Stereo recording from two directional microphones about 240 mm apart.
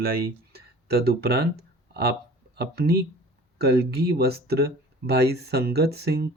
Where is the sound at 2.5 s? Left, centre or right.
Right.